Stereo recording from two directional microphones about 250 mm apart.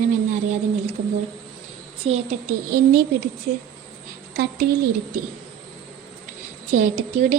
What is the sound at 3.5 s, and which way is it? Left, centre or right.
Speech, right.